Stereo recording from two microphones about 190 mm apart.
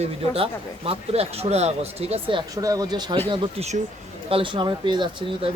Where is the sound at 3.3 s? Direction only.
35° right (ahead or behind).